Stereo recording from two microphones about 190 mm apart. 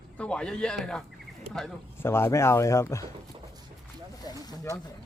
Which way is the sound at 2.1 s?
15° left (ahead or behind).